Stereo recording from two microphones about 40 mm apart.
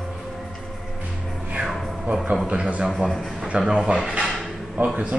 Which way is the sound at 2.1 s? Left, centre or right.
Right.